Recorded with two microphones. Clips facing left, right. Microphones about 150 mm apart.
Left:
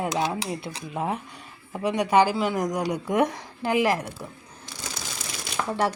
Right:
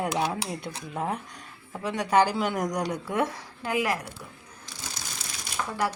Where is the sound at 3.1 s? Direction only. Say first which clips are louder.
Left 5 dB; 20° left (ahead or behind).